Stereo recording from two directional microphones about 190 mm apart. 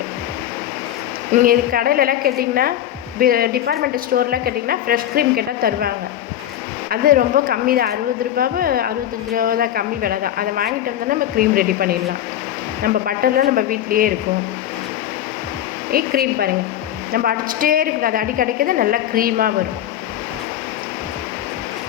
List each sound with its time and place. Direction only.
1.3 s a woman's voice: 45° right (ahead or behind)
6.9 s a woman's voice: 50° right (ahead or behind)
15.9 s a woman's voice: 50° right (ahead or behind)